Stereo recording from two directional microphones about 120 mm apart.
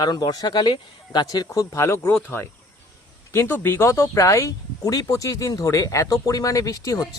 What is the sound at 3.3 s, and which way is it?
Speech, 20° left (ahead or behind).